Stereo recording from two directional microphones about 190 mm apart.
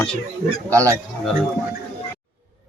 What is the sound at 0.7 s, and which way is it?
Speech, 15° right (ahead or behind).